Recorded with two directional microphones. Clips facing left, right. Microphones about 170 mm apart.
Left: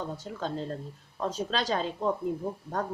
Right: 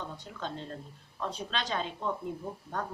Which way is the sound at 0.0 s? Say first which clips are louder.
Left 5 dB; 40° left (ahead or behind).